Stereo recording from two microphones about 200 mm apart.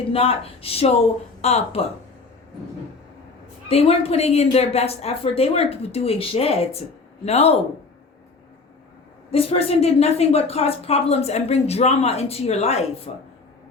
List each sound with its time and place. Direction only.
0.1 s speech: 30° left (ahead or behind)
3.7 s a woman's voice: 30° left (ahead or behind)
9.3 s a woman's voice: 30° left (ahead or behind)